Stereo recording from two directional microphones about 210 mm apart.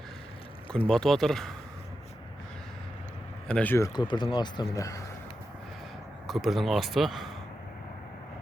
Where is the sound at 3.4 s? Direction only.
5° left (ahead or behind).